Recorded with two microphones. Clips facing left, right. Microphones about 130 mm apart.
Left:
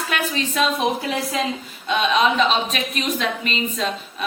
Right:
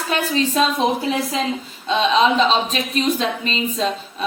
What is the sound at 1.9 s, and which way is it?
A woman's voice, 30° right (ahead or behind).